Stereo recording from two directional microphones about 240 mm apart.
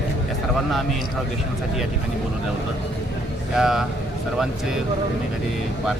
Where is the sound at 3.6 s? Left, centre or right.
Centre.